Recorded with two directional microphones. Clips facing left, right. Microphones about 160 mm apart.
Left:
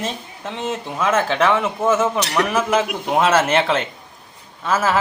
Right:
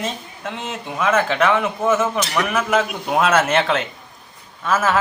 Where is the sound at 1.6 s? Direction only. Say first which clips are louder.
Even; centre (ahead or behind).